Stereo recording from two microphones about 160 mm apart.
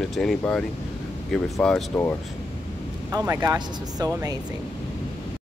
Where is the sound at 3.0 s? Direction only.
20° right (ahead or behind).